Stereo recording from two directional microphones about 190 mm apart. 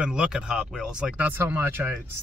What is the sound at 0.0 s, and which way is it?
Speech, 5° right (ahead or behind).